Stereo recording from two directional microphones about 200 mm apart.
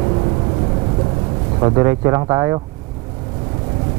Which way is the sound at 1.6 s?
20° right (ahead or behind).